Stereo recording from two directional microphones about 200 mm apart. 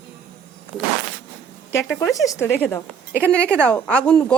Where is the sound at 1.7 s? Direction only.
15° left (ahead or behind).